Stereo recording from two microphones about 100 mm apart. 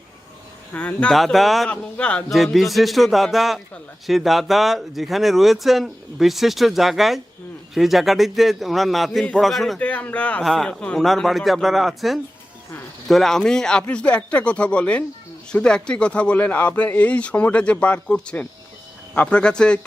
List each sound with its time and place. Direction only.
0.7 s speech: 15° left (ahead or behind)
1.1 s speech: centre (ahead or behind)
1.7 s speech: 10° left (ahead or behind)
2.3 s speech: centre (ahead or behind)
9.8 s speech: 15° left (ahead or behind)
10.4 s speech: centre (ahead or behind)